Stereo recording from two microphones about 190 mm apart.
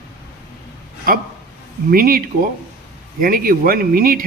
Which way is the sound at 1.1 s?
50° right (ahead or behind).